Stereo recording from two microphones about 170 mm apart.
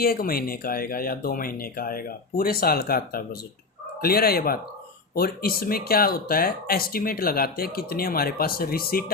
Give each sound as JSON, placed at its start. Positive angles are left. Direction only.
{"t": 0.0, "sound": "speech", "side_deg": 60}